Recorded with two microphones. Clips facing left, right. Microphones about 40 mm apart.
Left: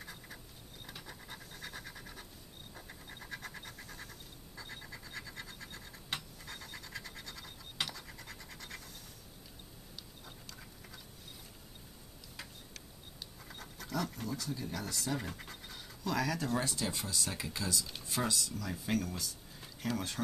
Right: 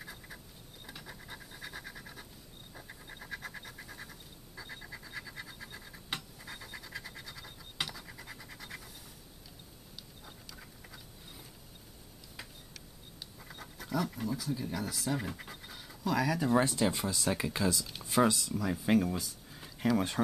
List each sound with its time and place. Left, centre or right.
0.0 s a sound: centre
0.8 s pant: centre
2.7 s scratch: centre
10.2 s a sound: centre
13.4 s speech: centre
16.5 s speech: right